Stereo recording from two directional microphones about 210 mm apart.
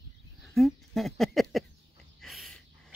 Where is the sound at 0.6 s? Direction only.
Centre (ahead or behind).